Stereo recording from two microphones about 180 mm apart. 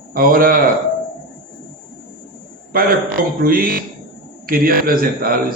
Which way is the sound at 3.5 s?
55° right (ahead or behind).